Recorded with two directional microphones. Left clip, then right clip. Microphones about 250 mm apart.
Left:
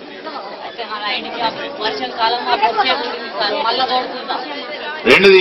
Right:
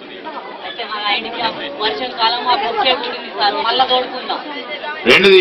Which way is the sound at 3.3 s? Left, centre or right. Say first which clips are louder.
Right 2 dB; centre.